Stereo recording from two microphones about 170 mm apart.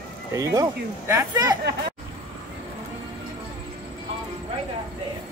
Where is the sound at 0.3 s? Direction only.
20° right (ahead or behind).